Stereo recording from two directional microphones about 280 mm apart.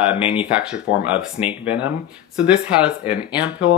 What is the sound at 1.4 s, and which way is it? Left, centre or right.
Speech, left.